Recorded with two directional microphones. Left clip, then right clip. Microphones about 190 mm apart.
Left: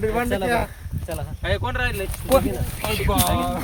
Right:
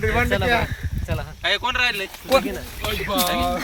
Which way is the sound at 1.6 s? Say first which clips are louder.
Right 5 dB; 50° left (ahead or behind).